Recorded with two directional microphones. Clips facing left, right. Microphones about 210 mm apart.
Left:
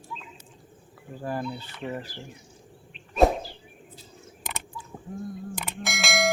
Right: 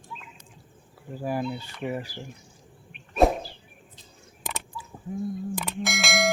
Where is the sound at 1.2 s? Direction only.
10° right (ahead or behind).